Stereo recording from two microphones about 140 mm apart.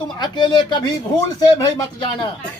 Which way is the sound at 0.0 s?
35° left (ahead or behind).